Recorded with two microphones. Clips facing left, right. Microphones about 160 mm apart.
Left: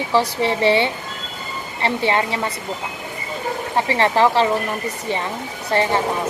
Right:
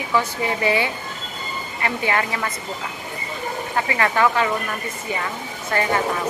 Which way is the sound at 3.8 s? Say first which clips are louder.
Left 3 dB; 25° left (ahead or behind).